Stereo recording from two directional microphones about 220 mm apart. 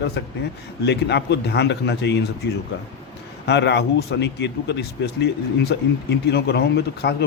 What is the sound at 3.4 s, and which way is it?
Speech, 50° left (ahead or behind).